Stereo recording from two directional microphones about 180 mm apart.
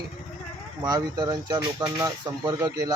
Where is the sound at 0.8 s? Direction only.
20° right (ahead or behind).